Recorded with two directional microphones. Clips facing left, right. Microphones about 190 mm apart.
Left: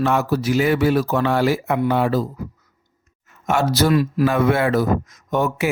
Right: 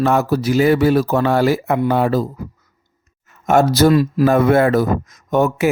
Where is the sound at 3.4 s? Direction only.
45° right (ahead or behind).